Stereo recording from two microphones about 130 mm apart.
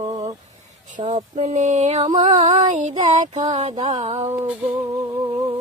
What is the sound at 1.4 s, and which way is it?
Female singing, 65° right (ahead or behind).